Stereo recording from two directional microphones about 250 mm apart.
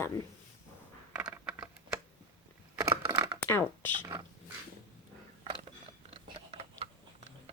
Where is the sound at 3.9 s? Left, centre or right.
Centre.